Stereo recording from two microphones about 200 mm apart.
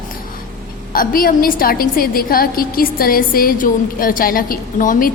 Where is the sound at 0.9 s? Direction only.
45° left (ahead or behind).